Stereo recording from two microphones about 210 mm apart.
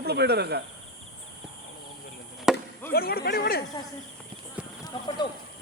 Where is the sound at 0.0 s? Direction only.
50° right (ahead or behind).